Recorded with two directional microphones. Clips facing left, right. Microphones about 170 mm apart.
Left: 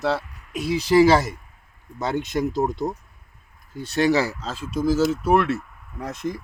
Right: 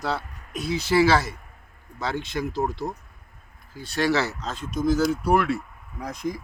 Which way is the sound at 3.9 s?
15° left (ahead or behind).